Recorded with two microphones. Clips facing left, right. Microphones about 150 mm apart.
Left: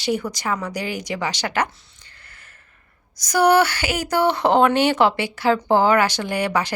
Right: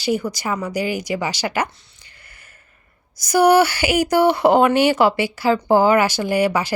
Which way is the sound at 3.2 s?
10° right (ahead or behind).